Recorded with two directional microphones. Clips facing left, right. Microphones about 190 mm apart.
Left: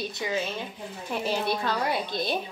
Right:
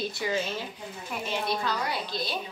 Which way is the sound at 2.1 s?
55° left (ahead or behind).